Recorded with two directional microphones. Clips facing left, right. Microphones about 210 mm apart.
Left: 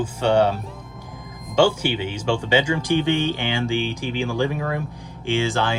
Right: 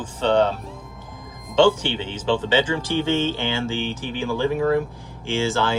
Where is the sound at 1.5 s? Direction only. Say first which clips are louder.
Right 1 dB; 10° left (ahead or behind).